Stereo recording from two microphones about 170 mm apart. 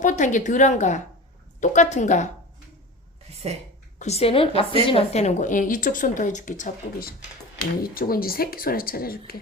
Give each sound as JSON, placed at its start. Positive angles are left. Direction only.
{"t": 0.0, "sound": "speech", "side_deg": 45}
{"t": 3.9, "sound": "a woman's voice", "side_deg": 40}
{"t": 7.8, "sound": "speech", "side_deg": 60}